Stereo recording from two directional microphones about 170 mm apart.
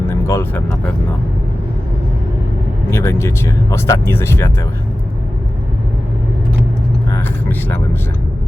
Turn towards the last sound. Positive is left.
turn(degrees=10)  # may be behind; listen again after turning